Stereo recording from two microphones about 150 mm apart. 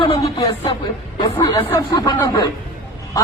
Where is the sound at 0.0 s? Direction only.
35° left (ahead or behind).